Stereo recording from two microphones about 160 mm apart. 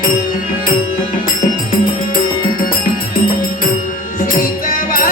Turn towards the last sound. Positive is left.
turn(degrees=60)  # may be behind; listen again after turning